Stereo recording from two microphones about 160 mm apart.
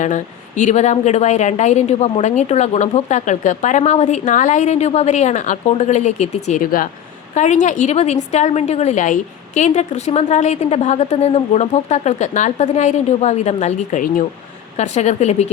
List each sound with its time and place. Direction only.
0.0 s a woman's voice: 50° left (ahead or behind)
6.6 s speech: 60° left (ahead or behind)
7.3 s a woman's voice: 50° left (ahead or behind)